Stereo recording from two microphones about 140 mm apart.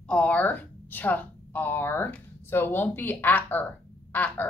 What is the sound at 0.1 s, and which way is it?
A woman's voice, 10° left (ahead or behind).